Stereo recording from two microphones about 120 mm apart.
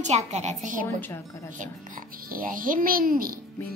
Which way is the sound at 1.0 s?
20° left (ahead or behind).